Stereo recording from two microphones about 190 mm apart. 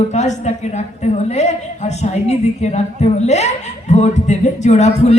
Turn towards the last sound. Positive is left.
turn(degrees=35)  # may be behind; listen again after turning